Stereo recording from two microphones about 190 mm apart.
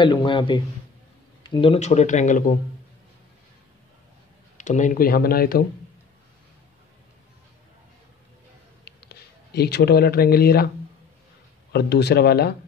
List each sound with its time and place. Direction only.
0.0 s a man's voice: 25° left (ahead or behind); by 2.5 s 40° left (ahead or behind)
4.6 s speech: 40° left (ahead or behind)
8.8 s a sound: 60° left (ahead or behind)
11.7 s speech: 60° left (ahead or behind)